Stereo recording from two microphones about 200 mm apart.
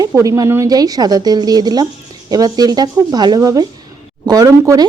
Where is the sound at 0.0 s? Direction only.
15° right (ahead or behind).